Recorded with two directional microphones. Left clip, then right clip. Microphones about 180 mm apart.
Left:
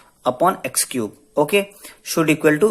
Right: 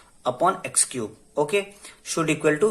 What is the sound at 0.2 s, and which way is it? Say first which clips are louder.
Speech: left 4 dB; 25° left (ahead or behind).